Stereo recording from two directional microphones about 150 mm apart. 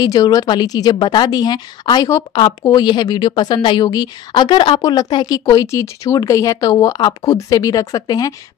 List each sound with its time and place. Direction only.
0.0 s a woman's voice: 25° left (ahead or behind)